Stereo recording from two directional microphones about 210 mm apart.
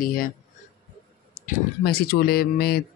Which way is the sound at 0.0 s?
45° left (ahead or behind).